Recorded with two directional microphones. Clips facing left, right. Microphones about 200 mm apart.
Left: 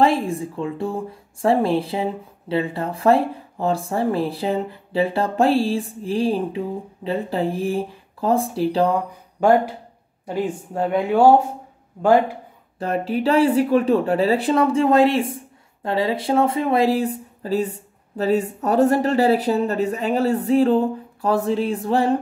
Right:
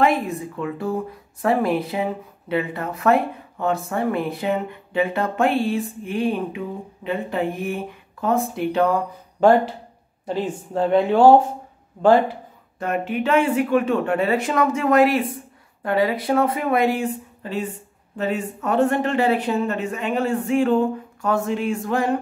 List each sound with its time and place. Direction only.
0.0 s speech: 30° left (ahead or behind)
9.4 s speech: 10° left (ahead or behind)
12.7 s speech: 35° left (ahead or behind)